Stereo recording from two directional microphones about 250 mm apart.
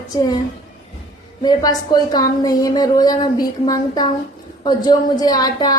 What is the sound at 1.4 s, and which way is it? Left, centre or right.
Speech, centre.